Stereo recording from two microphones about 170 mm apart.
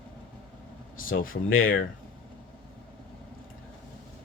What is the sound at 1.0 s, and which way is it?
Speech, 55° left (ahead or behind).